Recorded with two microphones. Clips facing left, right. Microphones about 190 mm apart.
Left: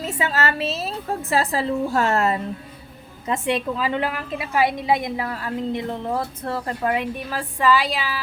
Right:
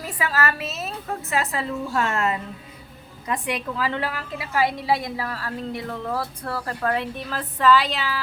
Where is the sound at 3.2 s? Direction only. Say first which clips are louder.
Left 4 dB; 25° left (ahead or behind).